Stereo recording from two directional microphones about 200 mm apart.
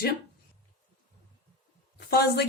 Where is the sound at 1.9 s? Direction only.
50° left (ahead or behind).